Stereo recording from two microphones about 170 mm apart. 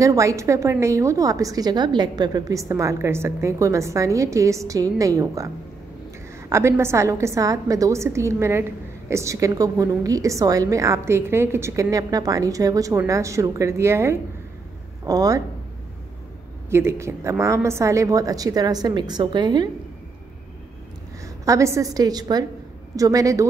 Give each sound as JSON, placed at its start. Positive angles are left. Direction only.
{"t": 0.0, "sound": "a woman's voice", "side_deg": -20}
{"t": 6.5, "sound": "a woman's voice", "side_deg": -15}
{"t": 16.7, "sound": "a woman's voice", "side_deg": -15}
{"t": 21.5, "sound": "a woman's voice", "side_deg": -15}